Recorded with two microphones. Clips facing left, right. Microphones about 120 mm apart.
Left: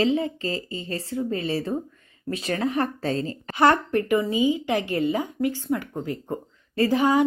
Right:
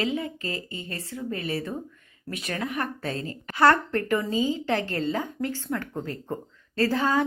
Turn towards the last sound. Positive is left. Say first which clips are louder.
# left 4 dB
turn(degrees=15)  # may be behind; listen again after turning